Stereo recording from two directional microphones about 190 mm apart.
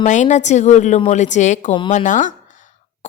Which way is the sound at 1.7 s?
25° left (ahead or behind).